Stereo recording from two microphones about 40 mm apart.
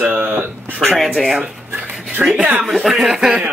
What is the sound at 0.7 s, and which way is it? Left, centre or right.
Speech, centre.